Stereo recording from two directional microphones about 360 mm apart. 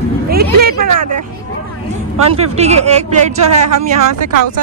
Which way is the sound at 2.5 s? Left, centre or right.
Centre.